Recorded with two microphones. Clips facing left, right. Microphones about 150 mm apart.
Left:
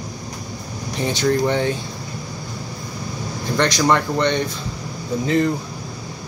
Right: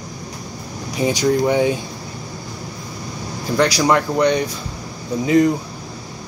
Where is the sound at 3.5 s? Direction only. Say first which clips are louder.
Right 2 dB; 10° right (ahead or behind).